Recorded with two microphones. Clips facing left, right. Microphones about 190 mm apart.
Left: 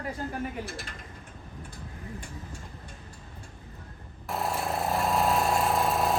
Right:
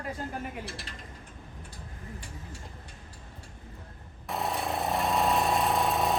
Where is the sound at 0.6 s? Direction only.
50° left (ahead or behind).